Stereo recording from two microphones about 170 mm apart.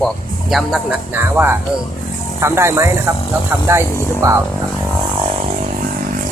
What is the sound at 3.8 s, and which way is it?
Speech, 15° left (ahead or behind).